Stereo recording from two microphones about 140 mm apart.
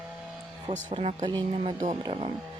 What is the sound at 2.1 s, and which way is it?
Speech, 45° right (ahead or behind).